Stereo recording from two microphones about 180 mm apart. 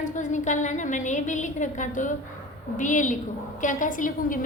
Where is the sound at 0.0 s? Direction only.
45° left (ahead or behind).